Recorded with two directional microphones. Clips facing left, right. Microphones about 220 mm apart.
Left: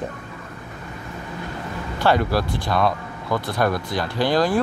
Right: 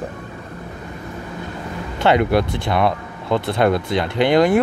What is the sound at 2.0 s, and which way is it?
Speech, 20° right (ahead or behind).